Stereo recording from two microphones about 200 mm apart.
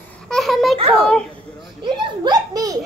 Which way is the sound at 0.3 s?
Centre (ahead or behind).